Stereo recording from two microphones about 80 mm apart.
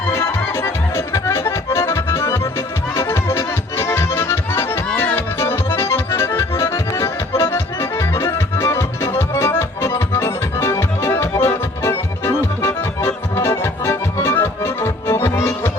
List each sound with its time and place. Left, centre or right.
0.1 s accordion: left